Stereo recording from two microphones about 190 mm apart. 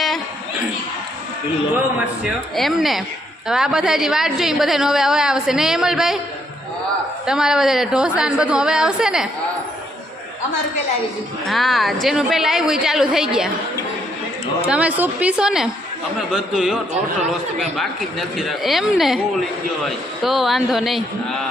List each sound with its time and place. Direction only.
1.7 s a woman's voice: 5° right (ahead or behind)
7.3 s a woman's voice: 5° right (ahead or behind)
11.4 s a woman's voice: centre (ahead or behind)
14.7 s a woman's voice: 5° right (ahead or behind)
18.3 s a woman's voice: centre (ahead or behind)